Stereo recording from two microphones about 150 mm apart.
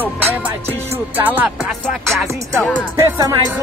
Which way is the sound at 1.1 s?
10° right (ahead or behind).